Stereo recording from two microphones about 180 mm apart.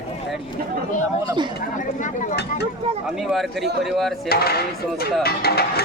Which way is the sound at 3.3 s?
Centre (ahead or behind).